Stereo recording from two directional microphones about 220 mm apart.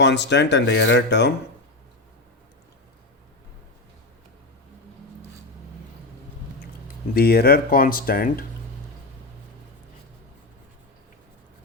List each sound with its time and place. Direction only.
0.0 s speech: 50° left (ahead or behind)
7.1 s speech: 45° left (ahead or behind)